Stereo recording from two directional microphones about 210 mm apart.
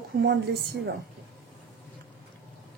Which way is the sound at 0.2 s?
50° right (ahead or behind).